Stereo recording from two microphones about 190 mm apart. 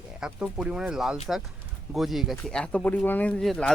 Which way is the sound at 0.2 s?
5° right (ahead or behind).